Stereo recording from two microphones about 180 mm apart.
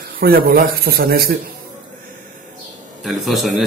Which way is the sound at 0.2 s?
55° right (ahead or behind).